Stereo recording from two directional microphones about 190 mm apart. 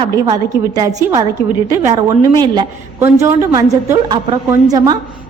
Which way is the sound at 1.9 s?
25° right (ahead or behind).